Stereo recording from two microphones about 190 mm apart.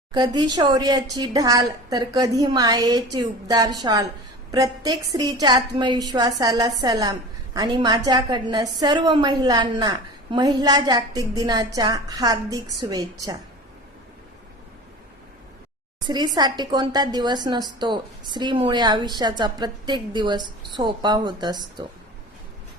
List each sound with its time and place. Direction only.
0.1 s a woman's voice: 20° right (ahead or behind)
16.0 s a woman's voice: 25° right (ahead or behind)